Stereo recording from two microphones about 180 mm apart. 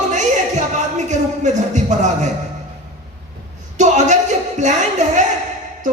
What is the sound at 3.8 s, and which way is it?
Speech, 40° right (ahead or behind).